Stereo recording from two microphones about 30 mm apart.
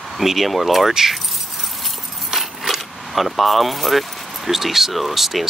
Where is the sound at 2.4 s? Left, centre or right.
Centre.